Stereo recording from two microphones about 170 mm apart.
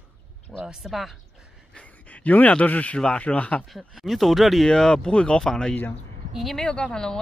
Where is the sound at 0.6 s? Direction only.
Centre (ahead or behind).